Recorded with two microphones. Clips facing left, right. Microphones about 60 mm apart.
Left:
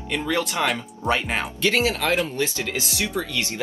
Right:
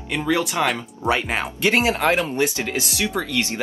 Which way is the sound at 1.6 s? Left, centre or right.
Right.